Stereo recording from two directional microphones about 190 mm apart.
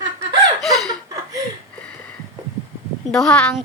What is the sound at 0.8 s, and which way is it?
Chuckle, 20° right (ahead or behind).